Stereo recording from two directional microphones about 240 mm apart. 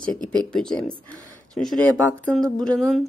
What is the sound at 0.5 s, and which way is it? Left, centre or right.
A woman's voice, centre.